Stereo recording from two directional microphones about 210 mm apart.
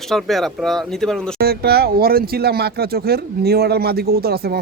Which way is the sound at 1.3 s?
50° right (ahead or behind).